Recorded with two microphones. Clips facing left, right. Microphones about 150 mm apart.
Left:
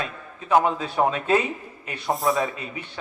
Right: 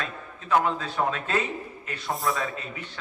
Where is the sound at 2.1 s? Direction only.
Centre (ahead or behind).